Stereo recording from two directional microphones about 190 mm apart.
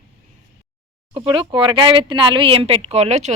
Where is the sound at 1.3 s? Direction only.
25° right (ahead or behind).